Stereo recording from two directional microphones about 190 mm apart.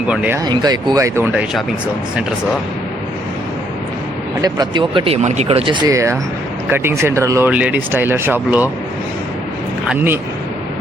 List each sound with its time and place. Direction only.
0.1 s speech: 5° right (ahead or behind)
0.4 s speech: 20° right (ahead or behind)
4.4 s speech: 20° right (ahead or behind)
9.9 s speech: 10° right (ahead or behind)